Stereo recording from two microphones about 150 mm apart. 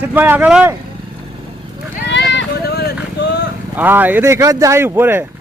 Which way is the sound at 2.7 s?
90° left.